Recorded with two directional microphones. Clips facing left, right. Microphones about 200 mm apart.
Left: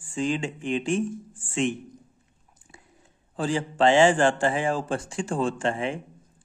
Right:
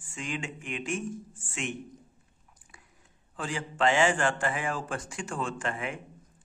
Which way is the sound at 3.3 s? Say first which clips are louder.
Left 8 dB; 30° left (ahead or behind).